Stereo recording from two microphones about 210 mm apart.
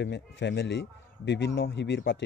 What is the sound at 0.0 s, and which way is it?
A man's voice, 55° left (ahead or behind).